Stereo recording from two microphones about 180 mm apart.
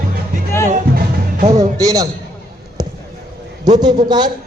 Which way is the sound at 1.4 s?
40° right (ahead or behind).